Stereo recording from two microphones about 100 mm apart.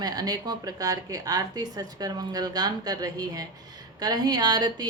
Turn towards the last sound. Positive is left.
turn(degrees=-40)  # may be behind; listen again after turning